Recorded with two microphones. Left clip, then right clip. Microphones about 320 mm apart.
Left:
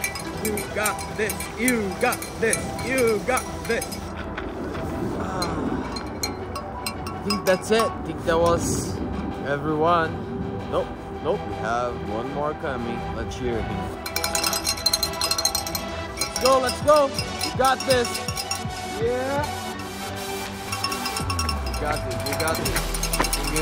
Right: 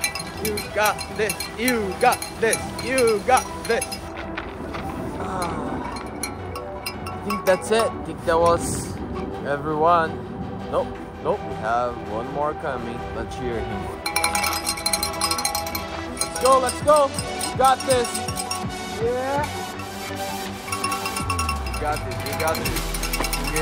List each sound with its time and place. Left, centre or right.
0.5 s speech: centre
1.6 s speech: right
2.4 s speech: centre
7.2 s speech: centre
11.2 s speech: centre
14.2 s music: centre
17.6 s speech: centre
21.3 s music: centre